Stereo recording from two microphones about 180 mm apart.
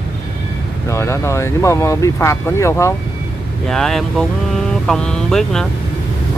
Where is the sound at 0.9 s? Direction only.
15° left (ahead or behind).